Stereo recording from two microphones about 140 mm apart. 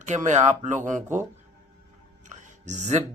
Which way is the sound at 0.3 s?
55° right (ahead or behind).